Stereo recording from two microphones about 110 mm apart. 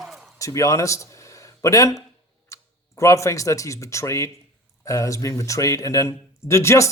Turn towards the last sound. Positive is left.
turn(degrees=25)  # may be behind; listen again after turning